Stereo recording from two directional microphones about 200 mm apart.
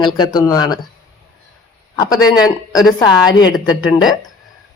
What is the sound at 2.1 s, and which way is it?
Speech, 20° left (ahead or behind).